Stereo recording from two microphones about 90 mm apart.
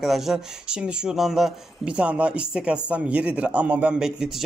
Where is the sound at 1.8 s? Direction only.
15° right (ahead or behind).